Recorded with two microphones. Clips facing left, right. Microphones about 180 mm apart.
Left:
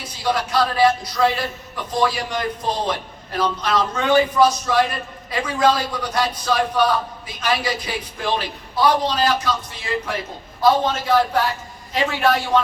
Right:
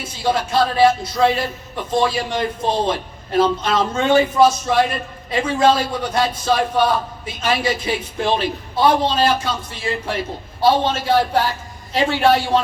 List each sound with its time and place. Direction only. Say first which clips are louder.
0.0 s a man's voice: right 2 dB; 25° right (ahead or behind)